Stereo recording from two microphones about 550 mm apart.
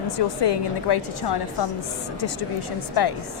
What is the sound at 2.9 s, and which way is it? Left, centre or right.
Speech, left.